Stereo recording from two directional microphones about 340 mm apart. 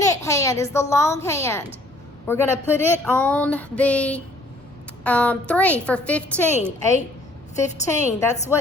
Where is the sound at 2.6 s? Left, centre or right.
Centre.